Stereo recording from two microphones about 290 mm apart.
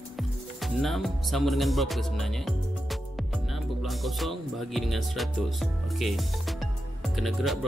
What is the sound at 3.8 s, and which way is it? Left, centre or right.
Speech, centre.